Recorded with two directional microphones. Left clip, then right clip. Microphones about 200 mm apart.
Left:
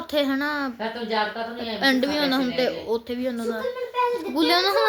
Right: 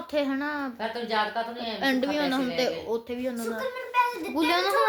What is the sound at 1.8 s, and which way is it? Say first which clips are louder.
A child's voice: left 5 dB; 15° left (ahead or behind).